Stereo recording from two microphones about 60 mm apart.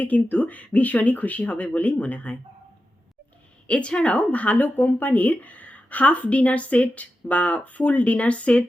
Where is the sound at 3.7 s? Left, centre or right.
Left.